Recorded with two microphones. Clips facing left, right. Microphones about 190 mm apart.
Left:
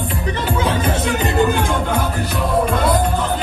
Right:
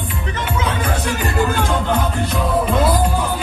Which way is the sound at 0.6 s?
25° left (ahead or behind).